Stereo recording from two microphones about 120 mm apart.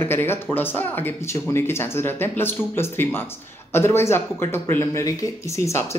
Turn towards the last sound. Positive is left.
turn(degrees=25)  # may be behind; listen again after turning